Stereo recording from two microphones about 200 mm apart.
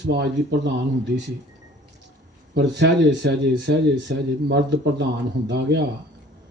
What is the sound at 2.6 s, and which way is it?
Speech, 60° right (ahead or behind).